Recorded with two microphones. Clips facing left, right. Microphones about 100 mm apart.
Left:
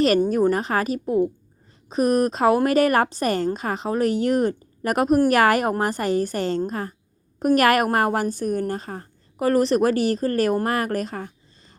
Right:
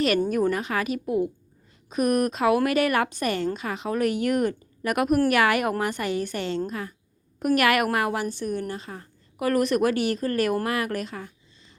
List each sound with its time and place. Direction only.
0.3 s a woman's voice: 30° left (ahead or behind)